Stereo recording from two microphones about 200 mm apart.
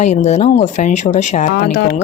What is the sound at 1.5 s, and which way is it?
Speech, 50° left (ahead or behind).